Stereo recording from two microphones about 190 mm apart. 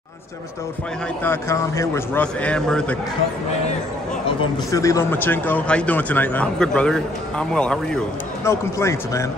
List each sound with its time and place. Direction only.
1.2 s speech: 15° left (ahead or behind)
4.6 s speech: 15° left (ahead or behind)
8.5 s speech: 15° left (ahead or behind)